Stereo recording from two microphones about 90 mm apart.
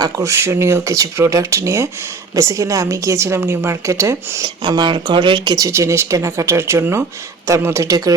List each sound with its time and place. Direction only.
0.0 s a woman's voice: 35° right (ahead or behind)
4.4 s speech: 55° right (ahead or behind)
5.5 s a woman's voice: 35° right (ahead or behind)